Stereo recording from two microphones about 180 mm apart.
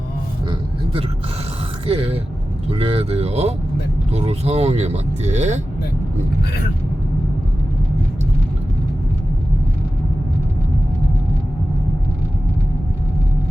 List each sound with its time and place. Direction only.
1.9 s speech: 35° right (ahead or behind)